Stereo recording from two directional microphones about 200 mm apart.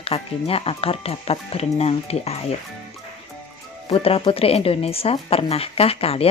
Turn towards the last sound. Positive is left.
turn(degrees=30)  # may be behind; listen again after turning